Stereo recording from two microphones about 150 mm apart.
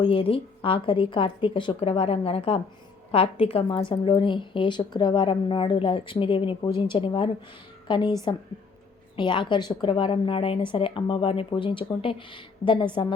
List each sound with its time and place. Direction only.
0.0 s a woman's voice: 35° left (ahead or behind)
9.1 s a woman's voice: 30° left (ahead or behind)